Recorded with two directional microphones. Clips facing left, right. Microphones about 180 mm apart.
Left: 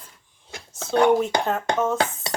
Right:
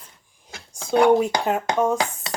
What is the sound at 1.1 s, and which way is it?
Speech, 15° right (ahead or behind).